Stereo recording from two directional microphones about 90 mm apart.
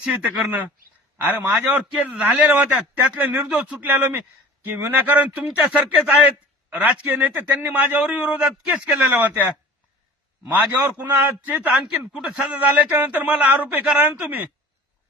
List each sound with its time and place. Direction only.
0.0 s a man's voice: 15° right (ahead or behind)
10.5 s a man's voice: 20° right (ahead or behind)